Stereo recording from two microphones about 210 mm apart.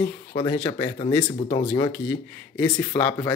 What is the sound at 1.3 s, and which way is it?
Speech, 30° left (ahead or behind).